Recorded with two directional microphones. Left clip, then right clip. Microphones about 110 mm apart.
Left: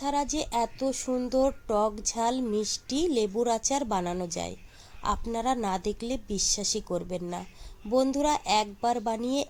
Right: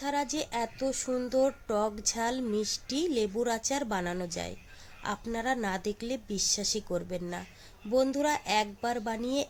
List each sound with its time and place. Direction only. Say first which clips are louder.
0.0 s speech: left 3 dB; 20° left (ahead or behind)